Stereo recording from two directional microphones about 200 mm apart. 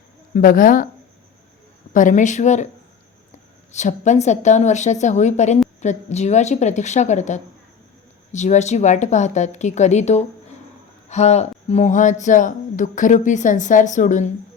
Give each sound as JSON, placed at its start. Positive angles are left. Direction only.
{"t": 0.3, "sound": "speech", "side_deg": 45}
{"t": 1.9, "sound": "speech", "side_deg": 40}
{"t": 3.7, "sound": "speech", "side_deg": 35}